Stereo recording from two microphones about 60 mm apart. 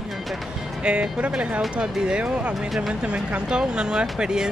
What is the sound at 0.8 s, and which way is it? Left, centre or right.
Speech, centre.